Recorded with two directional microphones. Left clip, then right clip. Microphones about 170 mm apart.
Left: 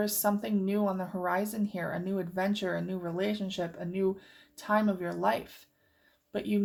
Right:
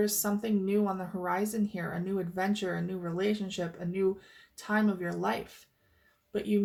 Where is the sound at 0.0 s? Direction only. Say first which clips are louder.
Left 1 dB; 35° left (ahead or behind).